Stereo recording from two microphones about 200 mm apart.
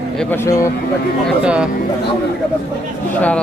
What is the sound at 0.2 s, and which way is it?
Speech, 10° left (ahead or behind).